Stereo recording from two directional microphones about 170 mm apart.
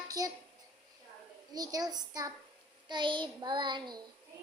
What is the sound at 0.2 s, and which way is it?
Child singing, 20° right (ahead or behind).